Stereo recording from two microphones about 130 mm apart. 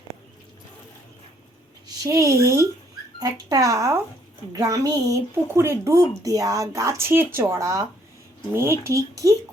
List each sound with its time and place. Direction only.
2.0 s speech: 25° right (ahead or behind)